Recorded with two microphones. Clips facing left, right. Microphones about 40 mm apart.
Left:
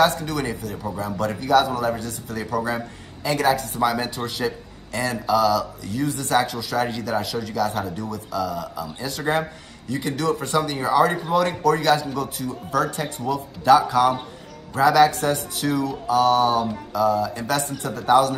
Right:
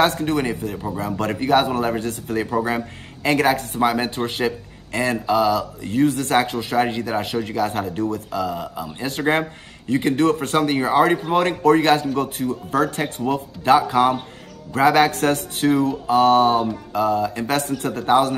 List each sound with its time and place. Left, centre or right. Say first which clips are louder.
0.1 s speech: right 5 dB; right